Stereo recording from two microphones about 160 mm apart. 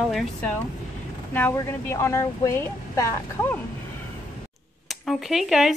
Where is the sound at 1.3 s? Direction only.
15° left (ahead or behind).